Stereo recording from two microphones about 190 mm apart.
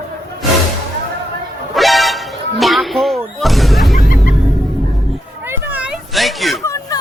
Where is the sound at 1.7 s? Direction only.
Centre (ahead or behind).